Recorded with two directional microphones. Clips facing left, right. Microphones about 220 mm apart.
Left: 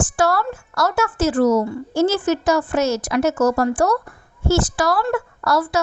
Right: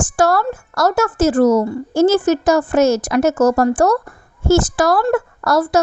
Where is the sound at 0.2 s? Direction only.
45° right (ahead or behind).